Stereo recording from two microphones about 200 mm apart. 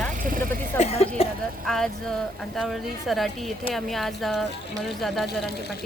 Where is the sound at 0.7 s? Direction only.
30° left (ahead or behind).